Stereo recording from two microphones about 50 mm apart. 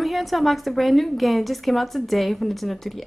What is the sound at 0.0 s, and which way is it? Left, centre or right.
Speech, centre.